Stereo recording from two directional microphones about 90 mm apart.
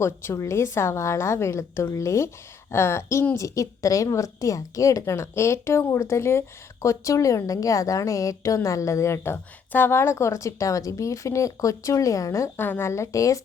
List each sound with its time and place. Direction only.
0.0 s a woman's voice: 30° left (ahead or behind)